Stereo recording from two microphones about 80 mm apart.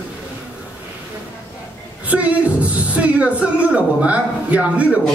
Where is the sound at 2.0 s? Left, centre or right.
Centre.